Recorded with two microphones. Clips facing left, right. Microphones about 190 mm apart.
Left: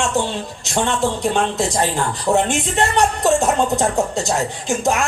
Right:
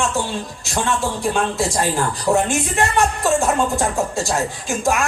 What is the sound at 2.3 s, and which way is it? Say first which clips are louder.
Speech: left 1 dB; 20° left (ahead or behind).